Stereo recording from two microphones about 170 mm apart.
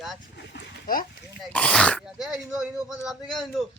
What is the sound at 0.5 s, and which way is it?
Speech, 55° left (ahead or behind).